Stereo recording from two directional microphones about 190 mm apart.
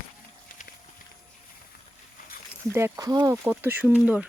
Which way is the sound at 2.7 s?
15° right (ahead or behind).